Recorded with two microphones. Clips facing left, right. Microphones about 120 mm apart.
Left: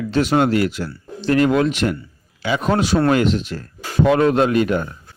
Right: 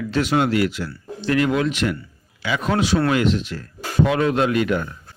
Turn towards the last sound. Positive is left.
turn(degrees=35)  # may be behind; listen again after turning